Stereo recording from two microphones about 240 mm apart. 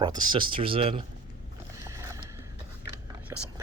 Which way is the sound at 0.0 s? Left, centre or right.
Centre.